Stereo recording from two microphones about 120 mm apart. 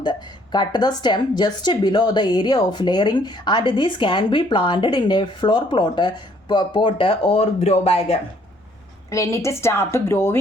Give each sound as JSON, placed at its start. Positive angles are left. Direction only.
{"t": 0.0, "sound": "a woman's voice", "side_deg": 40}
{"t": 9.0, "sound": "a woman's voice", "side_deg": 25}